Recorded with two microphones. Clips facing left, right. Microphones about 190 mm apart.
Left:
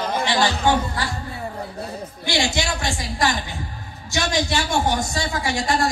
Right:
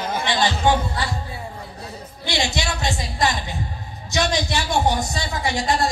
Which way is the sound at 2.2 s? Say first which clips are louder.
Left 1 dB; 20° right (ahead or behind).